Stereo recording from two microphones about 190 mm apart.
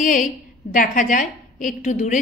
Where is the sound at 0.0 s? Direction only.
45° left (ahead or behind).